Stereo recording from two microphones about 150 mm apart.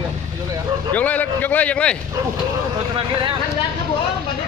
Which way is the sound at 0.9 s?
10° left (ahead or behind).